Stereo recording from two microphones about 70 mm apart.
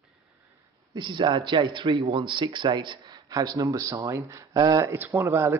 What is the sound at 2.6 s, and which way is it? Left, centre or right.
A man's voice, right.